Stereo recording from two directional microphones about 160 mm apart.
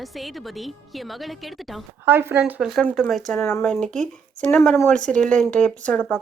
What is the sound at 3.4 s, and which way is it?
Speech, 15° left (ahead or behind).